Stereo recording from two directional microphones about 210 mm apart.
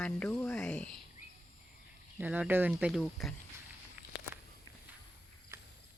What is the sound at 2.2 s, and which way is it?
Speech, 5° right (ahead or behind).